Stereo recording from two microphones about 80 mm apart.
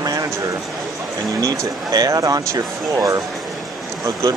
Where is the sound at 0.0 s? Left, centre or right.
Right.